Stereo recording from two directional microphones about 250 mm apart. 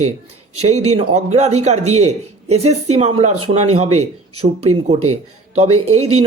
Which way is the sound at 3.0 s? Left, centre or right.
Right.